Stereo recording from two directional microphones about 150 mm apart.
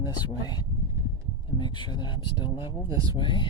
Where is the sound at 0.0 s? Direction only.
25° left (ahead or behind).